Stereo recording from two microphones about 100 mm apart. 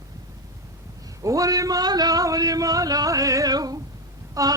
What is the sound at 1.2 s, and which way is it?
A man's voice, 35° right (ahead or behind).